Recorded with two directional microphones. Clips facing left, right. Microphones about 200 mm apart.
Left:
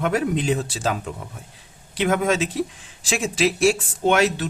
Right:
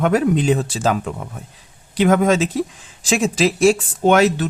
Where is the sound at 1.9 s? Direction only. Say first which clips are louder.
Right 6 dB; 45° right (ahead or behind).